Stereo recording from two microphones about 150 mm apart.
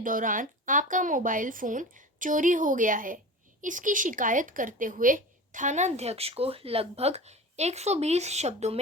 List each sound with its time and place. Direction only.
0.0 s a woman's voice: 65° right (ahead or behind); by 8.8 s 45° right (ahead or behind)